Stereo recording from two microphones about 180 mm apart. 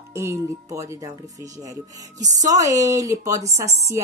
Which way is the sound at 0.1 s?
15° right (ahead or behind).